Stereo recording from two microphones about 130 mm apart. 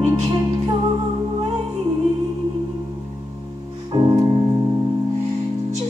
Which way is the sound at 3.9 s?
30° right (ahead or behind).